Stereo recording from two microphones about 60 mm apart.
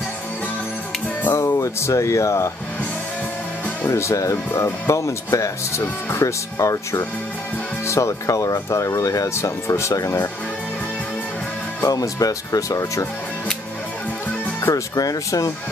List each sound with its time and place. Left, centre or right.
1.4 s speech: left
3.8 s speech: left
9.9 s speech: left
11.8 s speech: left
14.7 s speech: left